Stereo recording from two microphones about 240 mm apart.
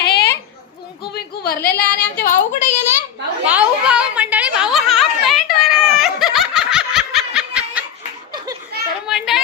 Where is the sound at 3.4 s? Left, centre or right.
Centre.